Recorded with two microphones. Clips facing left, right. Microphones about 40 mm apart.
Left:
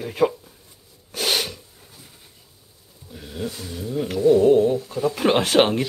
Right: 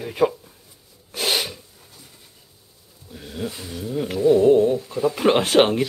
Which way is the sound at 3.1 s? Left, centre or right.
Centre.